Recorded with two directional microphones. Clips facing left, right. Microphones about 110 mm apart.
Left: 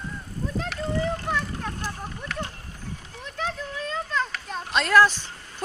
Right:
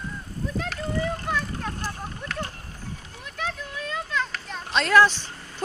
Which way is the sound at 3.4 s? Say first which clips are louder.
Left 1 dB; 30° left (ahead or behind).